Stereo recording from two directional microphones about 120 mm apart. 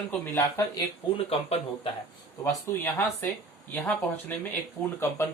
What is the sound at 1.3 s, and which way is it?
Speech, 55° left (ahead or behind).